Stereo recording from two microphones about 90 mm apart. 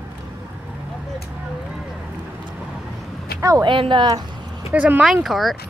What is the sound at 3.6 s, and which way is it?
Speech, 70° right (ahead or behind).